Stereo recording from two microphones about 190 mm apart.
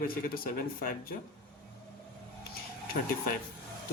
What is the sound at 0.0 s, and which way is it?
Speech, 50° left (ahead or behind).